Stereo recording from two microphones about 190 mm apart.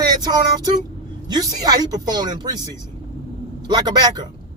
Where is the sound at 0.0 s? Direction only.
20° right (ahead or behind).